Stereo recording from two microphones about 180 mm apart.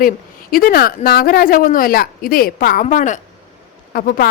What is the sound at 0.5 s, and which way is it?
A woman's voice, 55° left (ahead or behind).